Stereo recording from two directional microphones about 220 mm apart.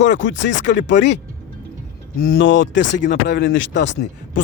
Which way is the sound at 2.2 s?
60° left (ahead or behind).